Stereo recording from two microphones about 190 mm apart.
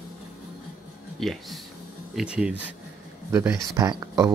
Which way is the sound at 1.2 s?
Centre (ahead or behind).